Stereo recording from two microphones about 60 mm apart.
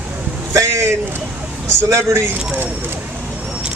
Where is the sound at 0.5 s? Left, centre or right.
Right.